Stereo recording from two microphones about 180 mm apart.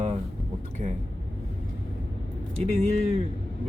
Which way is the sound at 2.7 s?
35° right (ahead or behind).